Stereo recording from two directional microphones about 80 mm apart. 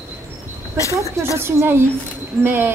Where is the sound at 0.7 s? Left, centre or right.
Left.